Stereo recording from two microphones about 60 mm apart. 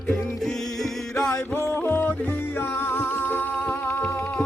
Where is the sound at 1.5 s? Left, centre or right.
Left.